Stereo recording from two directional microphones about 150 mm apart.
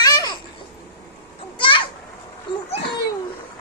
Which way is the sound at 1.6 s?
35° left (ahead or behind).